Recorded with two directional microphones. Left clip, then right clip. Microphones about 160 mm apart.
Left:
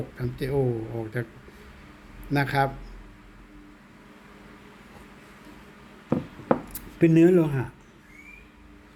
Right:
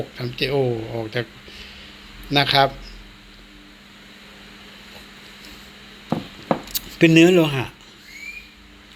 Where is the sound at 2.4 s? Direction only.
Centre (ahead or behind).